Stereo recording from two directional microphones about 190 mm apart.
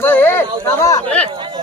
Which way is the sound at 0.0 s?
10° left (ahead or behind).